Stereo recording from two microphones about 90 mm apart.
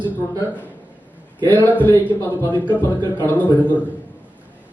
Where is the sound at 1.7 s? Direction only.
20° left (ahead or behind).